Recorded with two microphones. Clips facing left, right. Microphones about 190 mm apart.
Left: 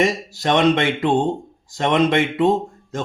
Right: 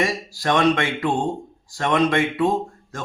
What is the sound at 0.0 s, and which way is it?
Speech, 20° left (ahead or behind).